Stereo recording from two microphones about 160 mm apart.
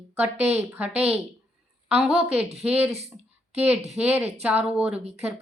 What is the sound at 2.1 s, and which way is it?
Speech, 40° right (ahead or behind).